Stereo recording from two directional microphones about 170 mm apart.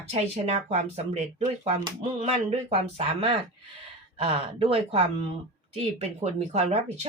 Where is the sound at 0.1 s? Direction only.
40° right (ahead or behind).